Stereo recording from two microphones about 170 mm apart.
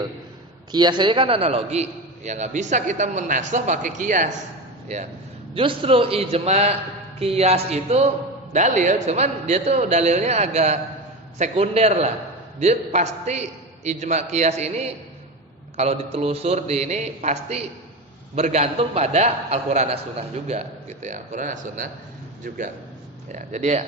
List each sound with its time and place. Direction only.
0.7 s a man's voice: 25° right (ahead or behind); by 4.3 s 45° right (ahead or behind)
5.5 s a man's voice: 30° right (ahead or behind)